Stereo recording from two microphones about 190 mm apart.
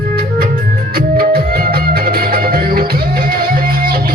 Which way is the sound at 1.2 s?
50° right (ahead or behind).